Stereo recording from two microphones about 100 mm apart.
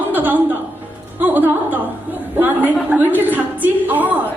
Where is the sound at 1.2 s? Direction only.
20° right (ahead or behind).